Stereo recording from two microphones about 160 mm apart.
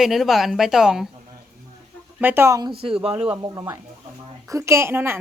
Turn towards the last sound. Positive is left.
turn(degrees=-15)  # may be behind; listen again after turning